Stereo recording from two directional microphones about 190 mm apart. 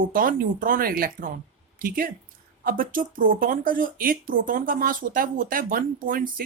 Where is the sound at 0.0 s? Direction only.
45° right (ahead or behind).